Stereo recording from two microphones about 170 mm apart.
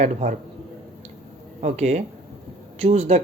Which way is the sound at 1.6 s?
40° right (ahead or behind).